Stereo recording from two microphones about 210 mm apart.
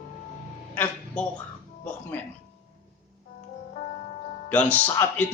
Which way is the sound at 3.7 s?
35° left (ahead or behind).